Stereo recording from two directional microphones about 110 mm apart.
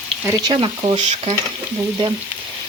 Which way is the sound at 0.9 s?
90° right.